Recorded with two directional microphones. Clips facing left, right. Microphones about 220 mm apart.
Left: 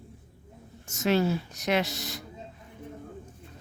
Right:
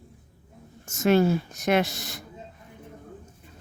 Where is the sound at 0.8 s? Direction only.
50° right (ahead or behind).